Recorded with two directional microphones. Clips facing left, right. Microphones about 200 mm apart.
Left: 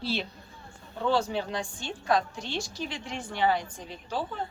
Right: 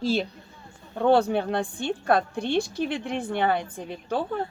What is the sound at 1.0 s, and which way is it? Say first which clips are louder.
A woman's voice: right 7 dB; 60° right (ahead or behind).